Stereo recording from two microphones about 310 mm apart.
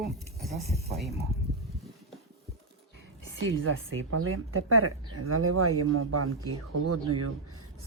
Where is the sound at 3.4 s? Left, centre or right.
Right.